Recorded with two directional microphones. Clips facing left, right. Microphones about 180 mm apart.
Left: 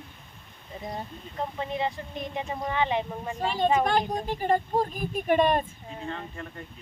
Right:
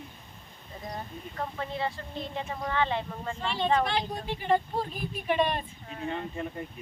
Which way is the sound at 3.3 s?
40° left (ahead or behind).